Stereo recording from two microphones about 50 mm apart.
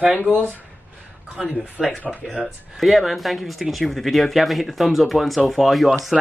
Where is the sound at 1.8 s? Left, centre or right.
Centre.